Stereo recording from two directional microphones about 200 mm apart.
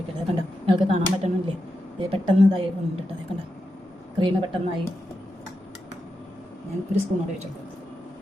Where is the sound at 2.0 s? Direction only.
25° right (ahead or behind).